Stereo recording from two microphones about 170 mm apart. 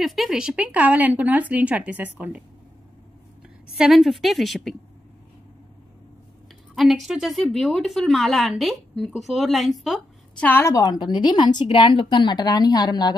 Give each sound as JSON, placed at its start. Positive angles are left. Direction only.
{"t": 0.0, "sound": "speech", "side_deg": 0}
{"t": 3.7, "sound": "a woman's voice", "side_deg": -5}
{"t": 6.7, "sound": "a woman's voice", "side_deg": 0}
{"t": 10.5, "sound": "a woman's voice", "side_deg": 15}